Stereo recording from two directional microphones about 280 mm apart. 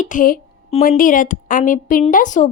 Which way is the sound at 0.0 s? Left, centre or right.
Left.